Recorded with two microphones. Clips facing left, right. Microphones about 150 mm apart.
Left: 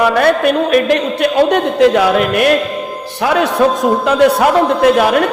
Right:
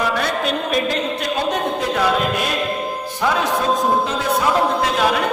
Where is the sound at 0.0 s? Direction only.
60° left (ahead or behind).